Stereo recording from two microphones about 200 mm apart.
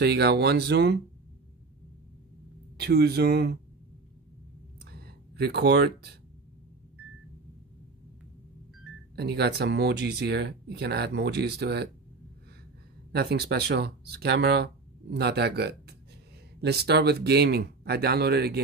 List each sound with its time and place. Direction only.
0.0 s speech: 55° right (ahead or behind)
2.8 s speech: 55° right (ahead or behind)
5.0 s speech: 50° right (ahead or behind)
9.1 s speech: 55° right (ahead or behind)
13.1 s speech: 50° right (ahead or behind)